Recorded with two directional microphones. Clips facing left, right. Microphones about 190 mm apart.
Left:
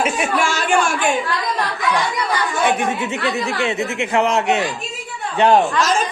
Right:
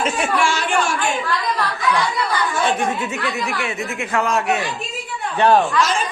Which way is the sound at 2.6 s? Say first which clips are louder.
Left 1 dB; 25° left (ahead or behind).